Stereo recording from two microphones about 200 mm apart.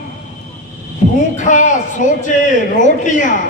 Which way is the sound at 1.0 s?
40° left (ahead or behind).